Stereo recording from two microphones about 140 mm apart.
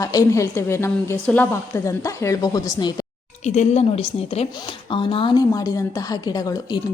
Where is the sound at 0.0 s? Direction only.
25° left (ahead or behind).